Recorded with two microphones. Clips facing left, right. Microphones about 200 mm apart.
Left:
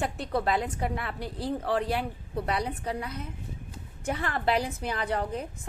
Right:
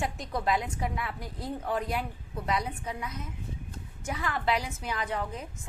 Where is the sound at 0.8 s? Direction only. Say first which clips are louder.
Left 2 dB; 60° left (ahead or behind).